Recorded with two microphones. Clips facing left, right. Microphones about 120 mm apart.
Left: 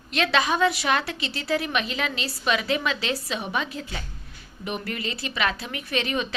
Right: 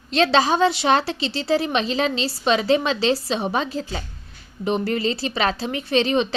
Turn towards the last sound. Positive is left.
turn(degrees=-30)  # may be behind; listen again after turning